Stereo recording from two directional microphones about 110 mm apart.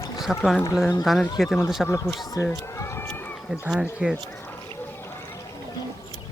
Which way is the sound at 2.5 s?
25° left (ahead or behind).